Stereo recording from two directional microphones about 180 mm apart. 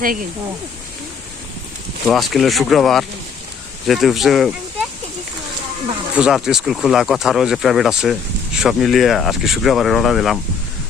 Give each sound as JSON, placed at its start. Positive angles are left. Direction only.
{"t": 2.0, "sound": "speech", "side_deg": 0}
{"t": 6.1, "sound": "speech", "side_deg": -5}